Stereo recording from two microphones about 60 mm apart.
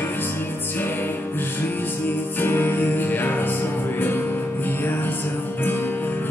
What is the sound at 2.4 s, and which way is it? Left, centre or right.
Music, left.